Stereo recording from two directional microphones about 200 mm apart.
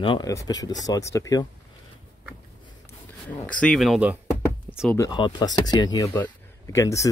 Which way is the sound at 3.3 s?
5° left (ahead or behind).